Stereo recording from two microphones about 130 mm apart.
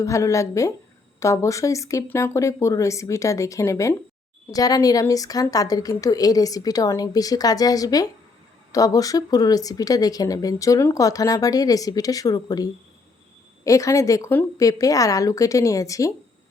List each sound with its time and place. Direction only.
0.0 s speech: 25° left (ahead or behind)